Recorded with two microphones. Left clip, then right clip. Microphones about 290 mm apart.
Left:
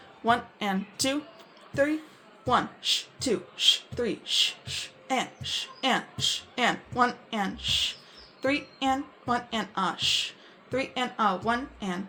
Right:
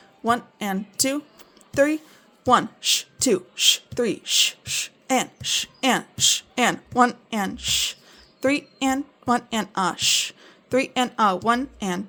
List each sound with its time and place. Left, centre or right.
0.3 s a woman's voice: right